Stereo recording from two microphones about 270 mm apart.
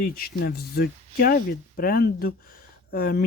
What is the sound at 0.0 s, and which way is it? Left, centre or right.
Speech, left.